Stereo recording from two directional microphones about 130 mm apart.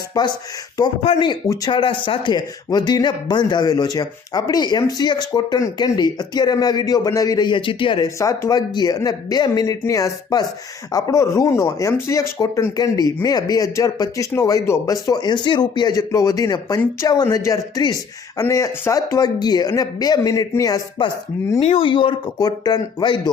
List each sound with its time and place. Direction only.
0.1 s speech: 30° left (ahead or behind)
8.0 s speech: 25° left (ahead or behind)
21.6 s speech: 45° left (ahead or behind)